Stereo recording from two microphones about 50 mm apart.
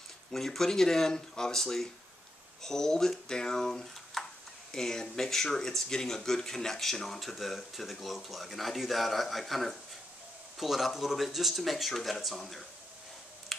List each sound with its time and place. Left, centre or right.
0.3 s speech: centre
13.5 s computer keyboard: centre